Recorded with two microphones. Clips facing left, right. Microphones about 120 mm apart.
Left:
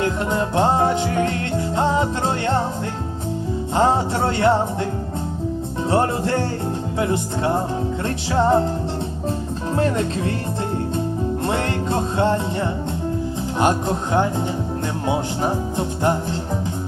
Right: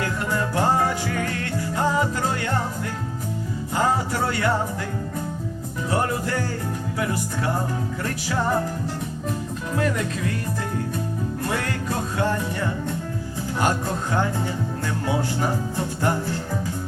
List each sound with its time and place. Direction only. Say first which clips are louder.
0.0 s music: left 4 dB; 20° left (ahead or behind)
3.8 s music: left 4 dB; 25° left (ahead or behind)
5.9 s speech: left 5 dB; 30° left (ahead or behind)
9.7 s speech: left 4 dB; 30° left (ahead or behind)
11.4 s music: left 3 dB; 25° left (ahead or behind)
13.6 s speech: left 4 dB; 20° left (ahead or behind)